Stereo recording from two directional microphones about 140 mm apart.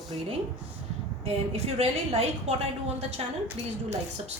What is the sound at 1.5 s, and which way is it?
A woman's voice, 50° right (ahead or behind).